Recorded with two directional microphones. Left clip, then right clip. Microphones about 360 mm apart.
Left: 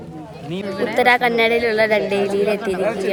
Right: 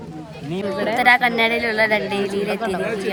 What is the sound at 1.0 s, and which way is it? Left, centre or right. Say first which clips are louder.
A man's voice: left 1 dB; centre.